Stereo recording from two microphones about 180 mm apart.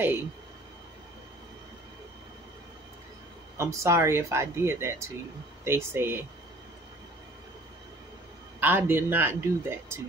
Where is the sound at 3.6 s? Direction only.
15° right (ahead or behind).